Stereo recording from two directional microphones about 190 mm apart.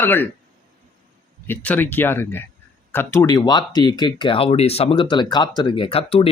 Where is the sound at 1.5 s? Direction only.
10° left (ahead or behind).